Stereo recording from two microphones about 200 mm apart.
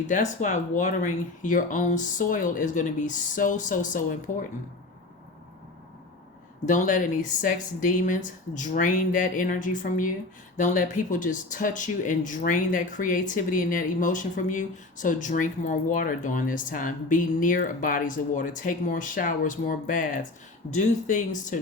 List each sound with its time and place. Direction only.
0.1 s speech: 35° left (ahead or behind)
6.7 s speech: 40° left (ahead or behind)